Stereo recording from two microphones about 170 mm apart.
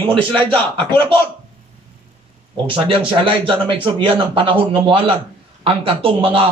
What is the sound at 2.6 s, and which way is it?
A man's voice, 30° right (ahead or behind).